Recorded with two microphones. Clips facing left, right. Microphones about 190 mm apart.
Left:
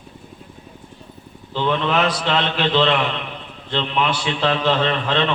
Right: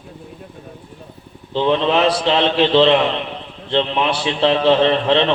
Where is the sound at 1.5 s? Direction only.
25° right (ahead or behind).